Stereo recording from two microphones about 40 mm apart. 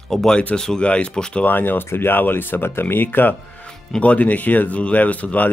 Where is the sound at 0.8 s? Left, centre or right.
Left.